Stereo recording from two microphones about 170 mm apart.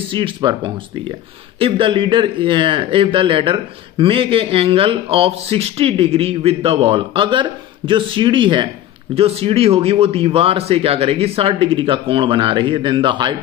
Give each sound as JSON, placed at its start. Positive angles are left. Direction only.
{"t": 0.1, "sound": "speech", "side_deg": -30}